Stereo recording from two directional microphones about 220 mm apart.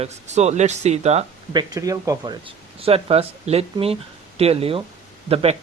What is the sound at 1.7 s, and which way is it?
Speech, 15° right (ahead or behind).